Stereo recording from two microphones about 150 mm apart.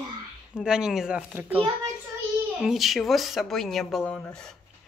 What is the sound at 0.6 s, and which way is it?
Speech, 5° right (ahead or behind).